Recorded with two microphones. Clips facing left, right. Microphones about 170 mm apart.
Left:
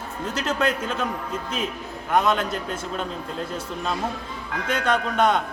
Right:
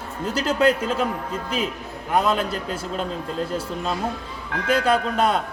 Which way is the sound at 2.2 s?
35° right (ahead or behind).